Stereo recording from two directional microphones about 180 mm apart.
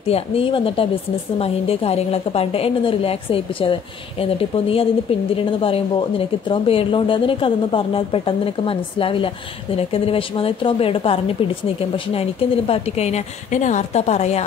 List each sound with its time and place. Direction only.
0.0 s speech: 30° left (ahead or behind)